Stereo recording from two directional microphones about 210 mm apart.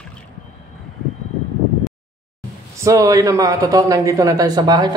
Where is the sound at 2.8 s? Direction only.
15° right (ahead or behind).